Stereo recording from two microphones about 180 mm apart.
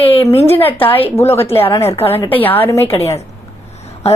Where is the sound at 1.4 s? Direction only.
30° left (ahead or behind).